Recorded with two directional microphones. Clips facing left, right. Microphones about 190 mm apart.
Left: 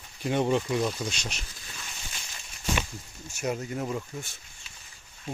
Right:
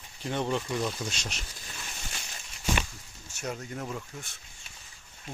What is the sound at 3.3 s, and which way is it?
Speech, 10° left (ahead or behind).